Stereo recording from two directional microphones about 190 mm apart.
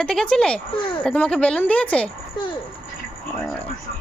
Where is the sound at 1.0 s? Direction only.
5° left (ahead or behind).